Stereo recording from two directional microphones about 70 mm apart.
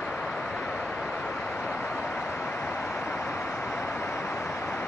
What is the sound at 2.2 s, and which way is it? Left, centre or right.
Vehicle, left.